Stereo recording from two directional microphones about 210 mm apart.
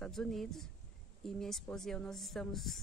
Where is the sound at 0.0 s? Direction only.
5° left (ahead or behind).